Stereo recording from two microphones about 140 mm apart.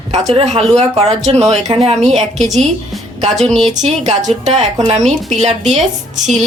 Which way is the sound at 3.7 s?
60° right (ahead or behind).